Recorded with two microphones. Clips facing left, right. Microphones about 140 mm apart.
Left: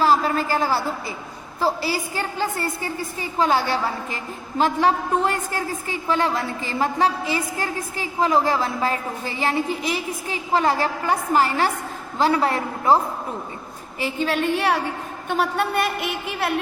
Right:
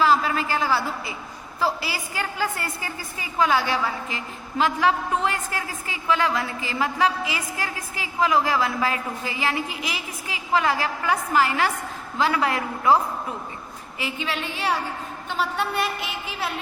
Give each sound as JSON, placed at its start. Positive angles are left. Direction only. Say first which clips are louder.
{"t": 0.0, "sound": "a sound", "louder": "left 2 dB", "side_deg": 40}
{"t": 1.6, "sound": "a woman's voice", "louder": "left 3 dB", "side_deg": 30}
{"t": 14.2, "sound": "a woman's voice", "louder": "left 10 dB", "side_deg": 50}